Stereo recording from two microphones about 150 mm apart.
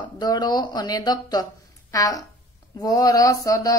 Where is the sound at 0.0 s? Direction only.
30° left (ahead or behind).